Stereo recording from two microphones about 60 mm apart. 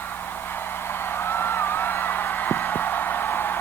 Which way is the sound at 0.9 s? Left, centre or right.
Left.